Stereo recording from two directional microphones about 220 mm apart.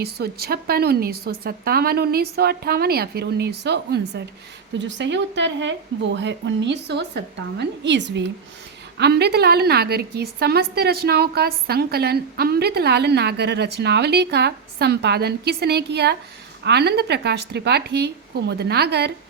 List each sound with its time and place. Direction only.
0.0 s a woman's voice: 45° right (ahead or behind)